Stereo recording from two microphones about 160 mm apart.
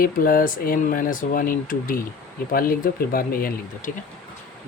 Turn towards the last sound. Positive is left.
turn(degrees=65)  # may be behind; listen again after turning